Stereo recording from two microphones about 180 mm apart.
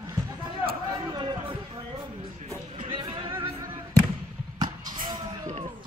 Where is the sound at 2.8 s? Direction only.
30° right (ahead or behind).